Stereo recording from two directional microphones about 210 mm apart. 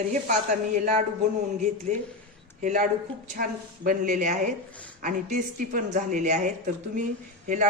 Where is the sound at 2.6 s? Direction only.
40° right (ahead or behind).